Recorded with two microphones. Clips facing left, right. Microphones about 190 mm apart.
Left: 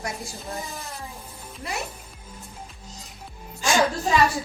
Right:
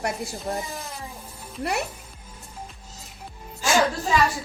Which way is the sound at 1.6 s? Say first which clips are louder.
Right 6 dB; 65° right (ahead or behind).